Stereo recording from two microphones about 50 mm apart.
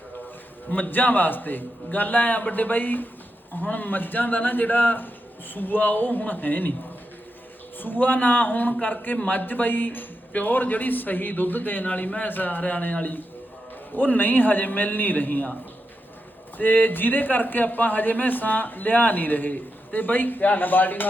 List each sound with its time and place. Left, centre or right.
0.7 s a man's voice: left
7.8 s a man's voice: left
16.6 s a man's voice: left